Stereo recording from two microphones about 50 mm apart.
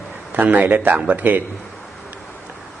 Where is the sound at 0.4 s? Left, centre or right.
Right.